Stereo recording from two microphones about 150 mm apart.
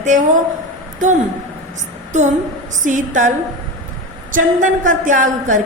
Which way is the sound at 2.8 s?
55° right (ahead or behind).